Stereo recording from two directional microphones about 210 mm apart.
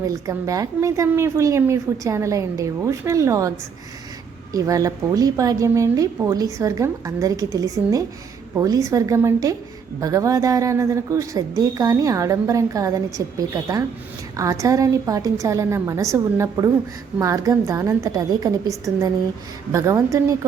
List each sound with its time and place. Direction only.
0.0 s a woman's voice: 15° right (ahead or behind)
4.5 s a woman's voice: 15° right (ahead or behind)